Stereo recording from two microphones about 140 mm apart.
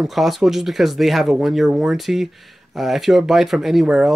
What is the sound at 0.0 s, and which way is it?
Speech, centre (ahead or behind).